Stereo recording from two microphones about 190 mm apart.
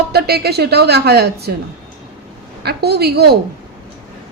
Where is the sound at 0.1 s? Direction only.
55° right (ahead or behind).